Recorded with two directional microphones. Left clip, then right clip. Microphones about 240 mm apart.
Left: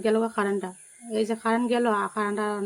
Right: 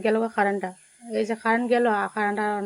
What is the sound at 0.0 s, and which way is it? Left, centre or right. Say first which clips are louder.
Speech: right 2 dB; centre.